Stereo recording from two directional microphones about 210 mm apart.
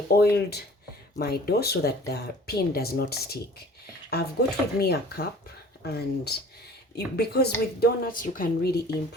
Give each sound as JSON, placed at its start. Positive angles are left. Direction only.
{"t": 0.2, "sound": "speech", "side_deg": 50}